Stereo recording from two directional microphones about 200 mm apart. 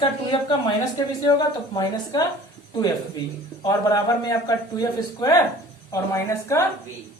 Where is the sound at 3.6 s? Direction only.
20° left (ahead or behind).